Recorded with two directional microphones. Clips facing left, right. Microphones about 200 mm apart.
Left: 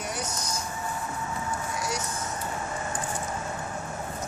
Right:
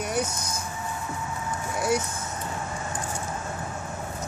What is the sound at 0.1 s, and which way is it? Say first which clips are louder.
Vehicle: right 5 dB; 55° right (ahead or behind).